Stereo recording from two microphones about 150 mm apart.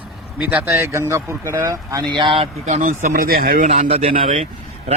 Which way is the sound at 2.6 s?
55° right (ahead or behind).